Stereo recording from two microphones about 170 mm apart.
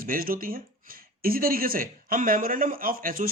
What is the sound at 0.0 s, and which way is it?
Speech, 55° right (ahead or behind).